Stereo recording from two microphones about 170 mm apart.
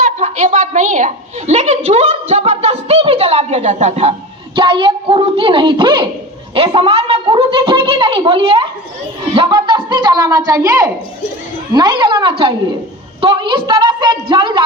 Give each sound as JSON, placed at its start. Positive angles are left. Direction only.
{"t": 0.0, "sound": "a woman's voice", "side_deg": -45}
{"t": 4.5, "sound": "a woman's voice", "side_deg": -30}